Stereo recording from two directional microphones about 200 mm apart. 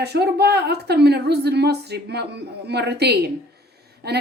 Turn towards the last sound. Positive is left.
turn(degrees=-55)  # may be behind; listen again after turning